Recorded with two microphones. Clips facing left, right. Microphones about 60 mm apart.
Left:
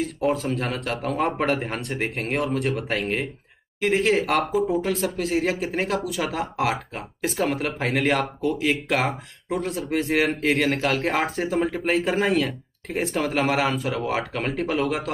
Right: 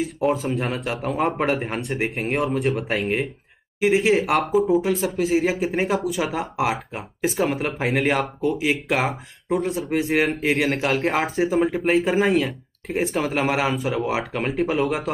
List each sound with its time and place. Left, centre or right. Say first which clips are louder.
0.0 s speech: right 2 dB; centre